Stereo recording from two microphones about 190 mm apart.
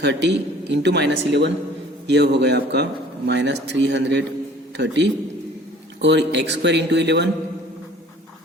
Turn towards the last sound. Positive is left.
turn(degrees=-65)  # may be behind; listen again after turning